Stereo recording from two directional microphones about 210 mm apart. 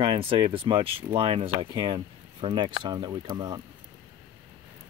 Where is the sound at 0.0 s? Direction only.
25° right (ahead or behind).